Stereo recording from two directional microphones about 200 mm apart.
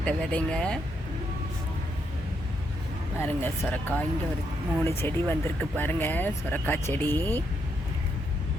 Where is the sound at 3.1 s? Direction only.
10° left (ahead or behind).